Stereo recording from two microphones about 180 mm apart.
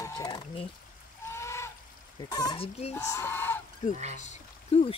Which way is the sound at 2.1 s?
20° left (ahead or behind).